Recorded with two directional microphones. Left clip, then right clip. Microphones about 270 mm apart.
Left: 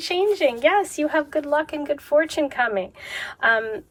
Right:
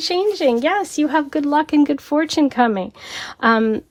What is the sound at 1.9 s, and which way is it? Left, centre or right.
Speech, right.